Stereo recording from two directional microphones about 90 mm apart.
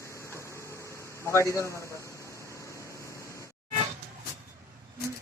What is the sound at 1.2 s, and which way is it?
Speech, 35° left (ahead or behind).